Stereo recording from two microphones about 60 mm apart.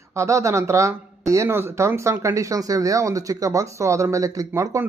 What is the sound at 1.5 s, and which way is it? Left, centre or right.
Speech, right.